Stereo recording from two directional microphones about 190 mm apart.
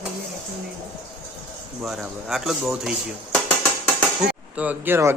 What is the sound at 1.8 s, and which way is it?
A man's voice, centre (ahead or behind).